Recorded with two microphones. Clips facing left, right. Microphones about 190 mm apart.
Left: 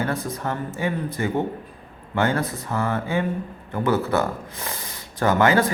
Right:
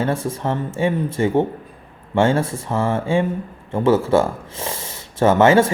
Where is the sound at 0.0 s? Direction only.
25° right (ahead or behind).